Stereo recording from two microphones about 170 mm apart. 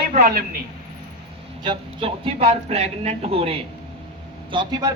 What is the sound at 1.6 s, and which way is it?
Speech, 30° right (ahead or behind).